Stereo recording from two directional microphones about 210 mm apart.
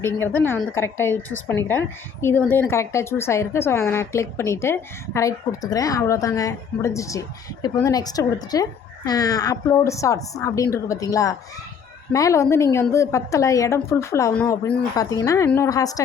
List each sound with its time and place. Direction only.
0.0 s a woman's voice: 10° left (ahead or behind)